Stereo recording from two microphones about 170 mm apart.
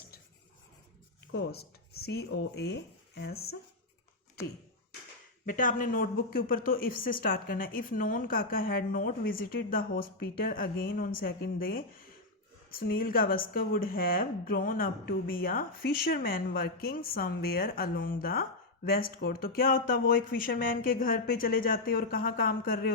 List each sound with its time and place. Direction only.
1.3 s speech: 80° left
5.5 s speech: 55° left (ahead or behind)